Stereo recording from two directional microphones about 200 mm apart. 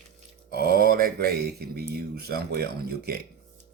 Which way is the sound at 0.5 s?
50° right (ahead or behind).